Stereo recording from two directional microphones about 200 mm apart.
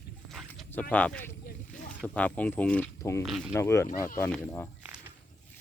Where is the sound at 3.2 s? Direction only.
Centre (ahead or behind).